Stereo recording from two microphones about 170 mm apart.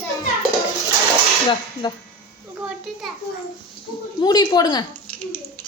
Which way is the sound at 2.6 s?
5° right (ahead or behind).